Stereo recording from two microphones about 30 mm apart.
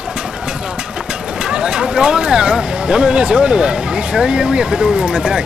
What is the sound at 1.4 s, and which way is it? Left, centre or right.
Speech, right.